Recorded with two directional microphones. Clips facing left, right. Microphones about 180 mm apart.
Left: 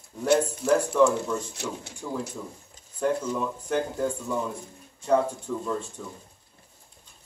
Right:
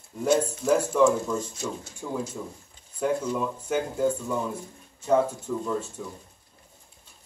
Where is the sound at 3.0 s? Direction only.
5° right (ahead or behind).